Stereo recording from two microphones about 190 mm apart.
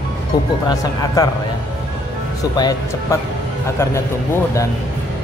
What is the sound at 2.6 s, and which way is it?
Speech, 20° left (ahead or behind).